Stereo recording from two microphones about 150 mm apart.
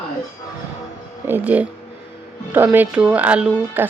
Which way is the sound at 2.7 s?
10° right (ahead or behind).